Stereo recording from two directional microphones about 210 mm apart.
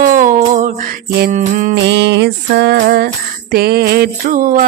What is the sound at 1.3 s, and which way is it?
Mantra, 35° right (ahead or behind).